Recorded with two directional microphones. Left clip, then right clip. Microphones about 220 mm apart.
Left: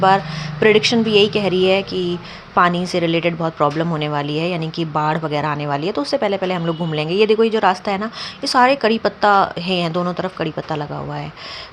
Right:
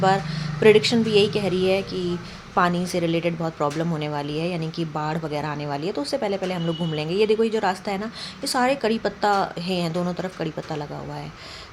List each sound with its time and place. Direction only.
0.6 s a woman's voice: 10° left (ahead or behind)